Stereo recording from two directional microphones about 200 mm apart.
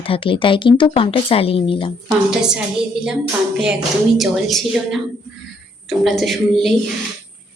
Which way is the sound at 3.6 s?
5° right (ahead or behind).